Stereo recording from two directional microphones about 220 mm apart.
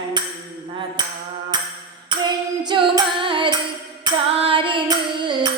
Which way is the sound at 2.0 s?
20° right (ahead or behind).